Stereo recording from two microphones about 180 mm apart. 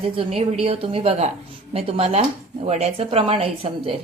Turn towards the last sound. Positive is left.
turn(degrees=-30)  # may be behind; listen again after turning